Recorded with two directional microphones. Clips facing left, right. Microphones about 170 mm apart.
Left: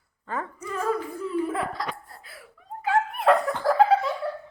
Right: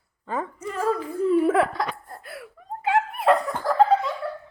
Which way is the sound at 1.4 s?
75° right (ahead or behind).